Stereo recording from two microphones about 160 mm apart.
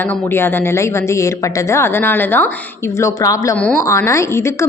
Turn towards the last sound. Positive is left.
turn(degrees=15)  # may be behind; listen again after turning